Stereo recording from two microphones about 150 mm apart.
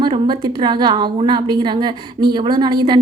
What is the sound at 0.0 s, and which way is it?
A woman's voice, 30° right (ahead or behind).